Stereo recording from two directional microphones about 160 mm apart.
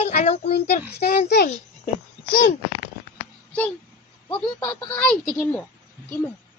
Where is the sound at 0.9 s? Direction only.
85° left.